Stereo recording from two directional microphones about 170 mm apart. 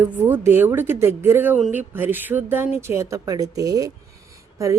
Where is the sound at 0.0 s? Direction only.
10° right (ahead or behind).